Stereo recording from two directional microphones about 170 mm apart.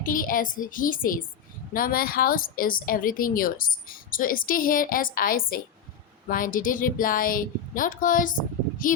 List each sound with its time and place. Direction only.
0.0 s a woman's voice: 55° left (ahead or behind)